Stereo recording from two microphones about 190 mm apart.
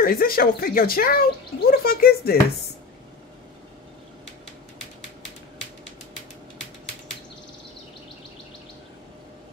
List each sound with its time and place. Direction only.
0.0 s speech: 50° left (ahead or behind)